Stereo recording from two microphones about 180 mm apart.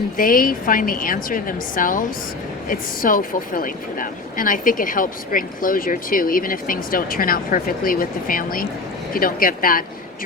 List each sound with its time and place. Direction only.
0.2 s speech: 50° left (ahead or behind)